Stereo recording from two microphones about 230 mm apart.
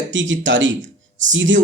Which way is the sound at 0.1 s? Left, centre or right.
Right.